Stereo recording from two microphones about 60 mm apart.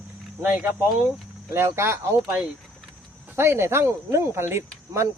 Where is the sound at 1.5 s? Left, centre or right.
Right.